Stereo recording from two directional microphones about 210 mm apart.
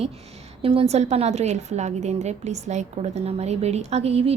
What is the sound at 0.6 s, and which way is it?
A woman's voice, 25° right (ahead or behind).